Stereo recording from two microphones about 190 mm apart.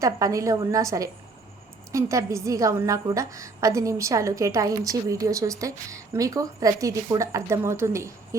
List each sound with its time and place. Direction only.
0.0 s a woman's voice: 15° right (ahead or behind)